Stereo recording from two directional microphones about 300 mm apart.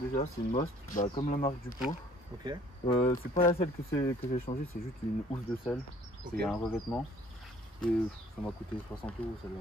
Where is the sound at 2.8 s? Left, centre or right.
Centre.